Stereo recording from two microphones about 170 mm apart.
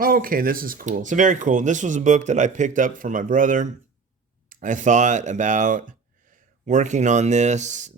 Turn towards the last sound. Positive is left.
turn(degrees=-45)  # may be behind; listen again after turning